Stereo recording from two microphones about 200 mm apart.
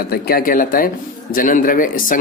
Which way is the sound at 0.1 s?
50° left (ahead or behind).